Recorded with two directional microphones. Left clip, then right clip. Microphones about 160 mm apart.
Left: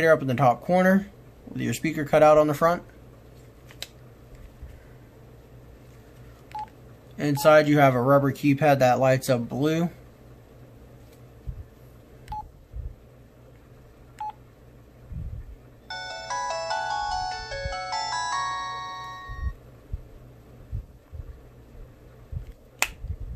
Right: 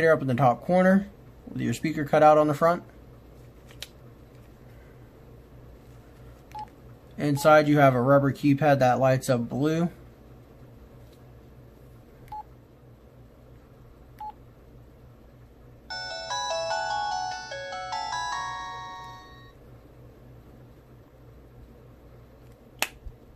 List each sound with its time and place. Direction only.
0.0 s speech: 5° left (ahead or behind)
6.5 s telephone dialing: 20° left (ahead or behind)
7.2 s speech: centre (ahead or behind)
12.3 s telephone dialing: 15° left (ahead or behind)
15.9 s ringtone: 10° left (ahead or behind)